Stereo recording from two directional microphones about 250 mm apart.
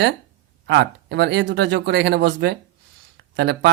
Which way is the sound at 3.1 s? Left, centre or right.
Right.